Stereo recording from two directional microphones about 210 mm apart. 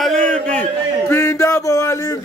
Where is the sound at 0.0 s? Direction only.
5° left (ahead or behind).